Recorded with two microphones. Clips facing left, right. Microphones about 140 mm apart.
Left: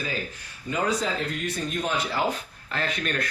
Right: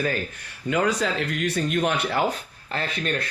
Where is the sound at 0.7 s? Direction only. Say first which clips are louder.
Right 3 dB; 80° right.